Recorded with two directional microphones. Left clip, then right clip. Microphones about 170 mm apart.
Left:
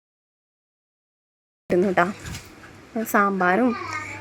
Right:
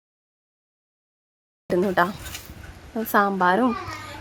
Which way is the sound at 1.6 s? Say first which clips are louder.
Left 1 dB; centre (ahead or behind).